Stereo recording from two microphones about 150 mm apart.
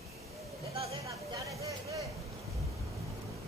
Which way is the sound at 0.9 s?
20° right (ahead or behind).